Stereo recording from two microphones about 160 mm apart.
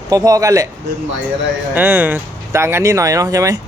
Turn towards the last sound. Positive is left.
turn(degrees=-20)  # may be behind; listen again after turning